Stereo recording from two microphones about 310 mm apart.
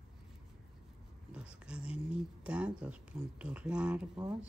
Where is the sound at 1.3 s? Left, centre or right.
Centre.